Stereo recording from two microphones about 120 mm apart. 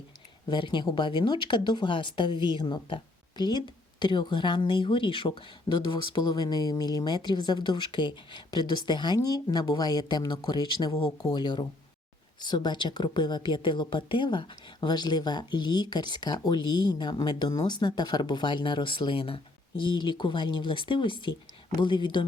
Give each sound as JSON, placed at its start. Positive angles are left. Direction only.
{"t": 0.4, "sound": "a woman's voice", "side_deg": 40}